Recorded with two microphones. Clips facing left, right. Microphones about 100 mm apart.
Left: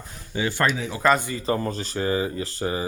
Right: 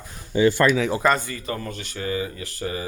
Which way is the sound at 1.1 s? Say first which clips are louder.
Left 2 dB; 20° left (ahead or behind).